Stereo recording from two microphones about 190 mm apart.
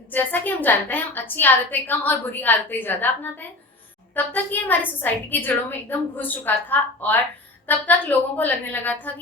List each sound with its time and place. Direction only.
0.1 s a woman's voice: 10° left (ahead or behind)